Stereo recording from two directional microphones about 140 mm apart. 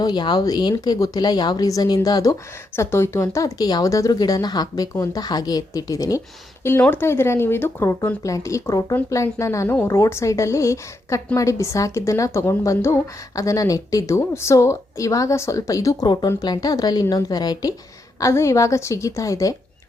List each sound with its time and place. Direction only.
0.0 s speech: 30° left (ahead or behind)